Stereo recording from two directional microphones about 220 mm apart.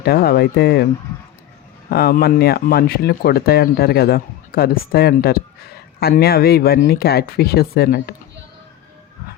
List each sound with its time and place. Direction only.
0.0 s speech: 45° left (ahead or behind)
1.9 s speech: 45° left (ahead or behind)